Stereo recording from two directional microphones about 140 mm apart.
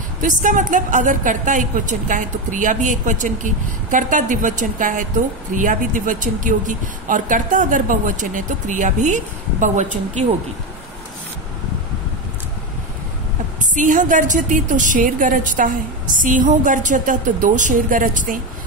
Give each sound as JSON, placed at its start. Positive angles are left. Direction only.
{"t": 0.2, "sound": "a woman's voice", "side_deg": -65}
{"t": 13.6, "sound": "a woman's voice", "side_deg": -65}